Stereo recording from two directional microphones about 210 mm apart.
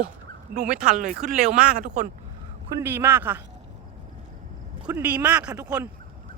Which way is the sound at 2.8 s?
10° right (ahead or behind).